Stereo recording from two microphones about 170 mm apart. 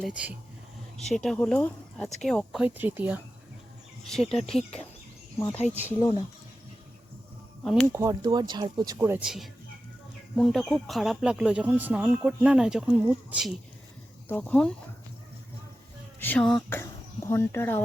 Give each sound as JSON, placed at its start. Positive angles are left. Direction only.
{"t": 0.0, "sound": "speech", "side_deg": -5}
{"t": 4.0, "sound": "speech", "side_deg": 0}
{"t": 6.0, "sound": "speech", "side_deg": 25}
{"t": 7.6, "sound": "speech", "side_deg": 0}
{"t": 7.9, "sound": "speech", "side_deg": -20}
{"t": 14.3, "sound": "speech", "side_deg": 10}
{"t": 16.2, "sound": "speech", "side_deg": 5}